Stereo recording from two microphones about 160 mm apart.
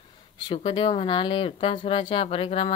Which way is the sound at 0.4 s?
30° left (ahead or behind).